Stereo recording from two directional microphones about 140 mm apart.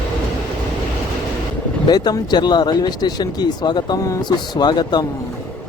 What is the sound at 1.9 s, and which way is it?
Speech, 30° left (ahead or behind).